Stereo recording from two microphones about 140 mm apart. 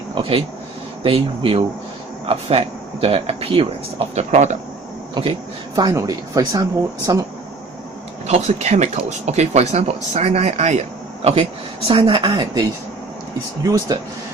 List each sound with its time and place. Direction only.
0.1 s speech: 40° right (ahead or behind)
5.1 s a woman's voice: 35° right (ahead or behind)
5.9 s speech: 25° right (ahead or behind)
8.3 s speech: 50° right (ahead or behind); by 12.6 s 35° right (ahead or behind)
13.7 s speech: 25° right (ahead or behind)